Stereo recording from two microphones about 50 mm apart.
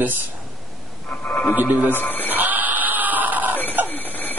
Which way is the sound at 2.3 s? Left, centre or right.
Right.